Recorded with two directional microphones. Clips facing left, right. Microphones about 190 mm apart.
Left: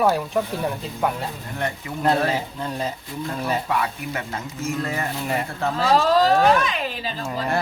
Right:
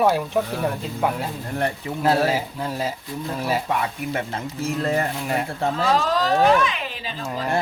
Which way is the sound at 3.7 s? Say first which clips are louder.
Right 1 dB; 25° right (ahead or behind).